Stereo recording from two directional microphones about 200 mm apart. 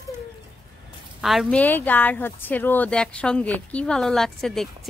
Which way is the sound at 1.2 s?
Centre (ahead or behind).